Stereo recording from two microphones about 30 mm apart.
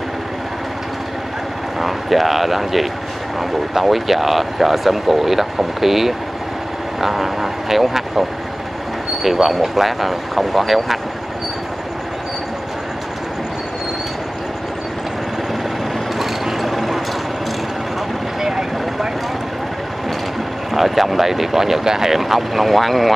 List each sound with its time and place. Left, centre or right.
1.8 s speech: centre
16.2 s vehicle: centre
18.4 s vehicle: centre
20.7 s speech: centre